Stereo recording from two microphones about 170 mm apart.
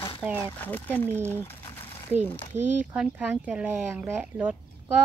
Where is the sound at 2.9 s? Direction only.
10° right (ahead or behind).